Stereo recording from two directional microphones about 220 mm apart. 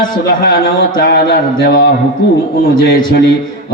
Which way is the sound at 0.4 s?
45° left (ahead or behind).